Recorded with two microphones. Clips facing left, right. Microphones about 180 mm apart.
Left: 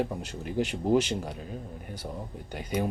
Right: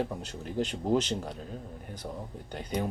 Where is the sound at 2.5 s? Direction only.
10° left (ahead or behind).